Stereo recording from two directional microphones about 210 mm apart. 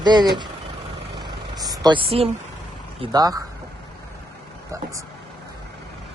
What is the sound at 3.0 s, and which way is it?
Speech, 20° right (ahead or behind).